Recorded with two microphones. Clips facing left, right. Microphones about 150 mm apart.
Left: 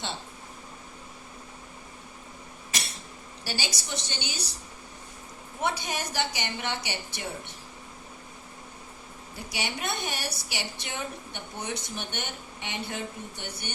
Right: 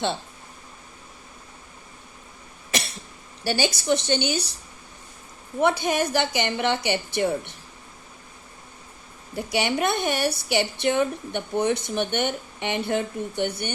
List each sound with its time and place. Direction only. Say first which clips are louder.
3.4 s a woman's voice: right 12 dB; 60° right (ahead or behind)
5.5 s a woman's voice: right 9 dB; 60° right (ahead or behind)
9.3 s a woman's voice: right 11 dB; 60° right (ahead or behind)